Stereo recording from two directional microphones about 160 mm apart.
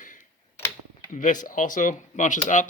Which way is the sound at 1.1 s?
55° left (ahead or behind).